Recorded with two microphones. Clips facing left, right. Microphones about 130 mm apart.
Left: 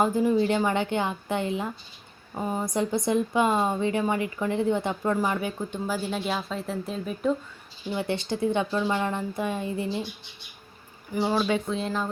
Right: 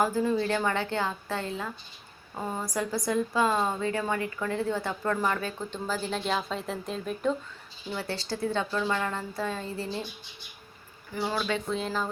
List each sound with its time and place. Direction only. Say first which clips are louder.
0.0 s a woman's voice: left 4 dB; 20° left (ahead or behind)
7.9 s a woman's voice: left 5 dB; 20° left (ahead or behind)
11.1 s a woman's voice: left 5 dB; 20° left (ahead or behind)
11.7 s speech: left 2 dB; centre (ahead or behind)